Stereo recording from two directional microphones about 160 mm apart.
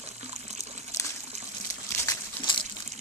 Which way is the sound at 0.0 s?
45° right (ahead or behind).